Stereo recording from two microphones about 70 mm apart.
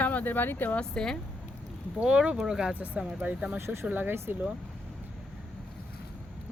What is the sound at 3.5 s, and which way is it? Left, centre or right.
Speech, right.